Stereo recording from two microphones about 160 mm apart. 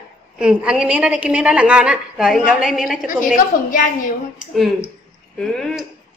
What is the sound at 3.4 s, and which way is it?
Speech, 60° left (ahead or behind).